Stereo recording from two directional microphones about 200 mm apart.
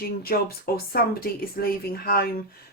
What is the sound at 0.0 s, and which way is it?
Speech, 50° left (ahead or behind).